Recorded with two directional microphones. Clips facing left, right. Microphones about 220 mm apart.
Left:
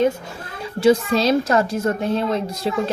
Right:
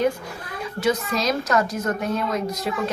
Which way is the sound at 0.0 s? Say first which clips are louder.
Left 3 dB; 25° left (ahead or behind).